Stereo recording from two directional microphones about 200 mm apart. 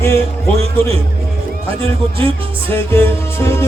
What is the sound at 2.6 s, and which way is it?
Music, 10° left (ahead or behind).